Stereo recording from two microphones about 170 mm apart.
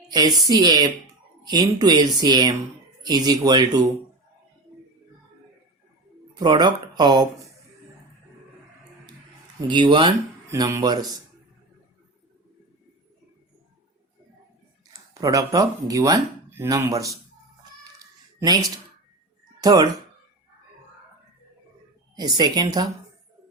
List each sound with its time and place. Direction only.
0.1 s speech: 25° right (ahead or behind)
6.4 s speech: 25° right (ahead or behind)
9.6 s speech: 25° right (ahead or behind)
10.5 s speech: 20° right (ahead or behind)
15.1 s speech: 20° right (ahead or behind)
18.0 s a sound: 20° right (ahead or behind)
19.6 s speech: 25° right (ahead or behind)
22.1 s speech: 25° right (ahead or behind)